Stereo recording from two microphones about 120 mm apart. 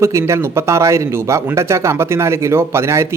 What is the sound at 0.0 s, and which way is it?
Speech, 25° right (ahead or behind).